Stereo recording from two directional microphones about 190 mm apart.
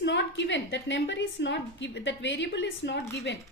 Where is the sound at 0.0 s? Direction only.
70° left (ahead or behind).